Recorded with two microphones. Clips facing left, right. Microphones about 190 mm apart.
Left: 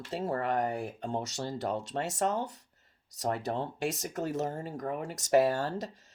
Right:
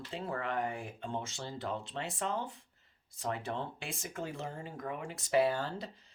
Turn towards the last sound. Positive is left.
turn(degrees=45)  # may be behind; listen again after turning